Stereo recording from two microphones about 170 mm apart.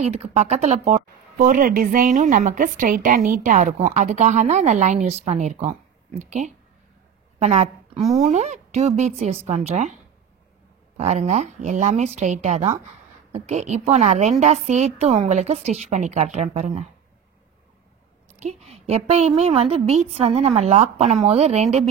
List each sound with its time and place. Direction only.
0.0 s a woman's voice: 40° right (ahead or behind)
11.0 s a woman's voice: 40° right (ahead or behind)
18.3 s a woman's voice: 40° right (ahead or behind)